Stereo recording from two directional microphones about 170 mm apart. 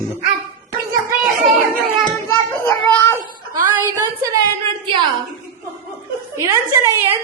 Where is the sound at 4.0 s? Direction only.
20° right (ahead or behind).